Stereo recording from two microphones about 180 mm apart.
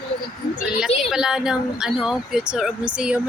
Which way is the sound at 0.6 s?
5° right (ahead or behind).